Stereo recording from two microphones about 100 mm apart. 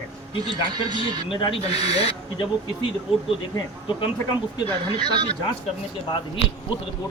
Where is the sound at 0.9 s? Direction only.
50° right (ahead or behind).